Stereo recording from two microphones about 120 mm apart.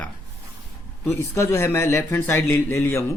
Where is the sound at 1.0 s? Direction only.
25° left (ahead or behind).